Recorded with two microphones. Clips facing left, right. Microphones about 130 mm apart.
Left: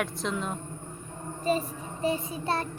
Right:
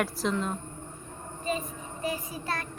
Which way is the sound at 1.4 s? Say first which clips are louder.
Left 5 dB; 35° left (ahead or behind).